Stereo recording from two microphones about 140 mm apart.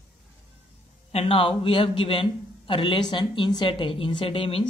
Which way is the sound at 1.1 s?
40° left (ahead or behind).